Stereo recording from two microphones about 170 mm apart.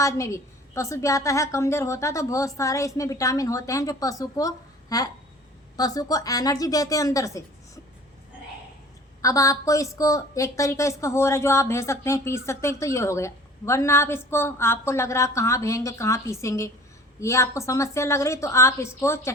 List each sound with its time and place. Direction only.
0.0 s a woman's voice: 20° left (ahead or behind)
9.2 s a woman's voice: 20° left (ahead or behind)